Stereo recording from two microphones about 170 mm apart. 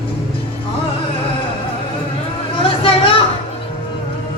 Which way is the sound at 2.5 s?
30° left (ahead or behind).